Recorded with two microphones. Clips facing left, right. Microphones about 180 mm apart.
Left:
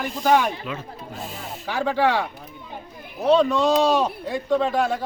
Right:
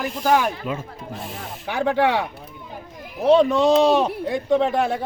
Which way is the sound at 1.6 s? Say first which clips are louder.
Right 2 dB; 15° right (ahead or behind).